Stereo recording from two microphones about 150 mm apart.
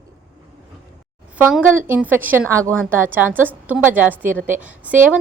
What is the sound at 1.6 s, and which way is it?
A woman's voice, 15° right (ahead or behind).